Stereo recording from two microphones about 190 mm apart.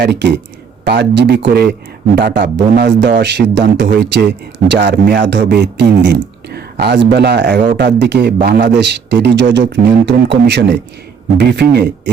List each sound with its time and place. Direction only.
0.0 s a man's voice: 65° right (ahead or behind)